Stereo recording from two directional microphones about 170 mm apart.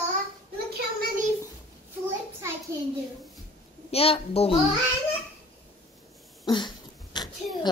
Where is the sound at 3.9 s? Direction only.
35° left (ahead or behind).